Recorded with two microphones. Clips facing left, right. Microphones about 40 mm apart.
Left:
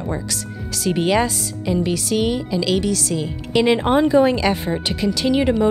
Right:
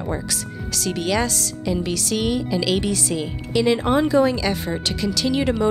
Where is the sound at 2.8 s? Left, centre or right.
Right.